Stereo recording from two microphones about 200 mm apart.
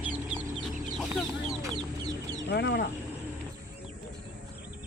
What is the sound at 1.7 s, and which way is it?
Chicken, 20° right (ahead or behind).